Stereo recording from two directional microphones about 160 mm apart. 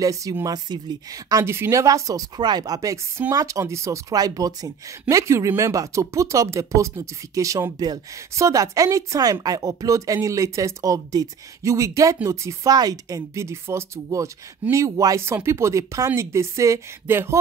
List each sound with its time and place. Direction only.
0.0 s a woman's voice: 20° right (ahead or behind)